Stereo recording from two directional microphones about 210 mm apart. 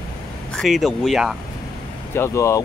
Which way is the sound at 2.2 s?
15° left (ahead or behind).